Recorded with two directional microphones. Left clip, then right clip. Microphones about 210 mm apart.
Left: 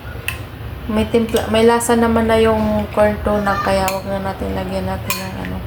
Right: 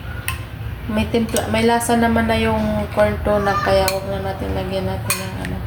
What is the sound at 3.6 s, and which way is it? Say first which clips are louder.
Speech: even; 10° left (ahead or behind).